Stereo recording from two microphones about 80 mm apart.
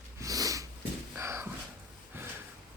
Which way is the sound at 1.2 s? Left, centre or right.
Right.